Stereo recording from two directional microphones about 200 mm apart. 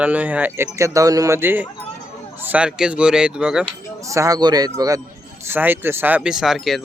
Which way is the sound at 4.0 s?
15° right (ahead or behind).